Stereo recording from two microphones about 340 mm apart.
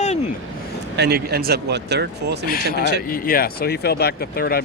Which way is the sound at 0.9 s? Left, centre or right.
Right.